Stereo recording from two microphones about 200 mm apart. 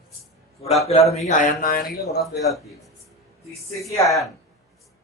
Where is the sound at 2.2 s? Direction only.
Centre (ahead or behind).